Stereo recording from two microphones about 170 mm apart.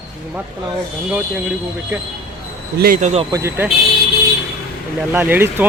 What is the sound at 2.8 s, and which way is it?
Speech, 55° right (ahead or behind).